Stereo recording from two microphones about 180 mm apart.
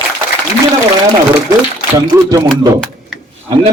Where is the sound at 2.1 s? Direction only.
20° right (ahead or behind).